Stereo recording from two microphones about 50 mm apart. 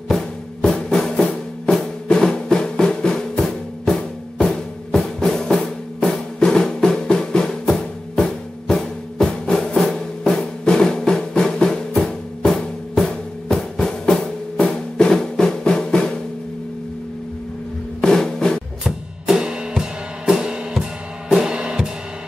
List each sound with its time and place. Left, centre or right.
0.1 s music: centre
10.4 s drum: centre
12.0 s music: centre
12.9 s drum: centre
18.0 s music: centre
18.9 s drum kit: centre
19.7 s music: centre